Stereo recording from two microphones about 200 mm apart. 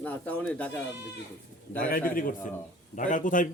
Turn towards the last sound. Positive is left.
turn(degrees=40)  # may be behind; listen again after turning